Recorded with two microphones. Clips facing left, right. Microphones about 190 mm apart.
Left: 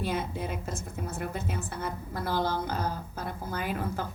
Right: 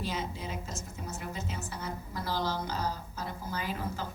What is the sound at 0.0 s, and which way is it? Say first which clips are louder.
A woman's voice: left 4 dB; 55° left (ahead or behind).